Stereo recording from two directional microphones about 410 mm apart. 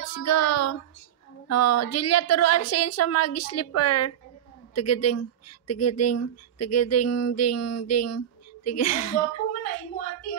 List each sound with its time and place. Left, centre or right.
0.0 s music: left
1.5 s speech: left